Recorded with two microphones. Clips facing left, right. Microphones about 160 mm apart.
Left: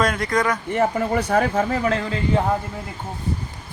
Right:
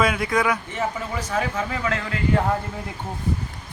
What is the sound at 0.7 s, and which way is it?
Speech, 60° left (ahead or behind).